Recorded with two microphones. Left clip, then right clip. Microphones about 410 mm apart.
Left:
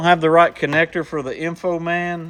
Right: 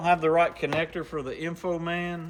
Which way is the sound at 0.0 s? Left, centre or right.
Centre.